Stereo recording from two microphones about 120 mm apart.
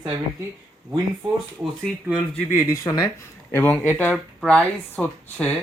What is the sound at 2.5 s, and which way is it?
Speech, 25° left (ahead or behind).